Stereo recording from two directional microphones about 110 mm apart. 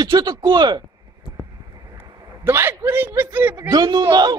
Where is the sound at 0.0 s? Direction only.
40° right (ahead or behind).